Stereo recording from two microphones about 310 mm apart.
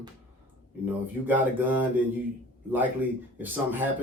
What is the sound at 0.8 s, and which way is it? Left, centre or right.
A man's voice, centre.